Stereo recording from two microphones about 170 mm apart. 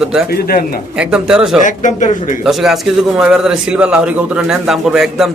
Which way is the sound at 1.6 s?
45° left (ahead or behind).